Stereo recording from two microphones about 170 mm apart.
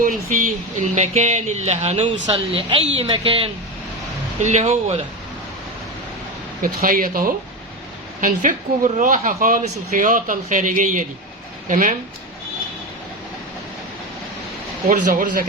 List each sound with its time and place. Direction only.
0.0 s speech: 50° right (ahead or behind); by 3.5 s 30° right (ahead or behind)
4.4 s speech: 45° right (ahead or behind)
6.6 s speech: 55° right (ahead or behind)
14.8 s speech: 50° right (ahead or behind)